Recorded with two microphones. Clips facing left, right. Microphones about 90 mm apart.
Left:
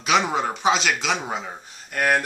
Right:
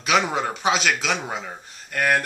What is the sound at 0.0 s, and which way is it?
Speech, centre (ahead or behind).